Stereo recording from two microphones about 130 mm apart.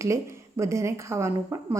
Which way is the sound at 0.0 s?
25° right (ahead or behind).